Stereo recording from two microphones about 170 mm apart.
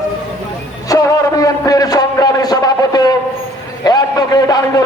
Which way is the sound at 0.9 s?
20° left (ahead or behind).